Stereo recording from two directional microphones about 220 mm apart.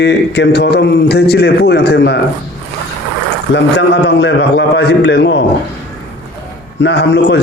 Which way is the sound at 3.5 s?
50° left (ahead or behind).